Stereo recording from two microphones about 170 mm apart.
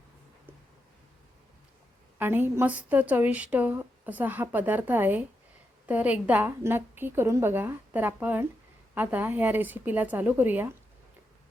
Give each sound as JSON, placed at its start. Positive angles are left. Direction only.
{"t": 2.1, "sound": "a woman's voice", "side_deg": -10}